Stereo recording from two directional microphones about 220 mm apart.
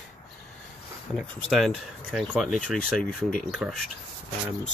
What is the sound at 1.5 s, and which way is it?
Speech, centre (ahead or behind).